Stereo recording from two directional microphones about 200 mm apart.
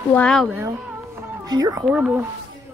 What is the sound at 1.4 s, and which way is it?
Speech, 20° right (ahead or behind).